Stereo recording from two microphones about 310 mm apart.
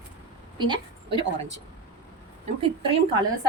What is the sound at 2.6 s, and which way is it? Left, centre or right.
Speech, centre.